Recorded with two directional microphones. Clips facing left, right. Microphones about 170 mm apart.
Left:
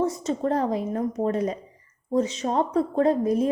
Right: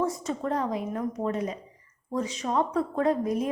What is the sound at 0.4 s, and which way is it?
A woman's voice, 35° left (ahead or behind).